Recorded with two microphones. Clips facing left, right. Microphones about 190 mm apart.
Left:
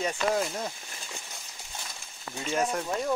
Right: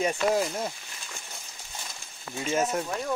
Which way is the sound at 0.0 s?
10° right (ahead or behind).